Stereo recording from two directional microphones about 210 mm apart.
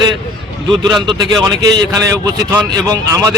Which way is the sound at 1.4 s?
15° right (ahead or behind).